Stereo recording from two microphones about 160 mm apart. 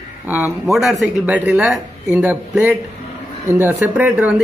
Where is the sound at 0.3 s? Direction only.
5° right (ahead or behind).